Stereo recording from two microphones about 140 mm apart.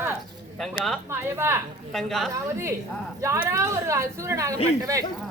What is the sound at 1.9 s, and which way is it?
Speech, centre (ahead or behind).